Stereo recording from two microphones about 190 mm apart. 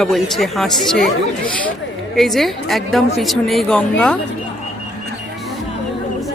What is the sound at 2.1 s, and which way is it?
Speech, centre (ahead or behind).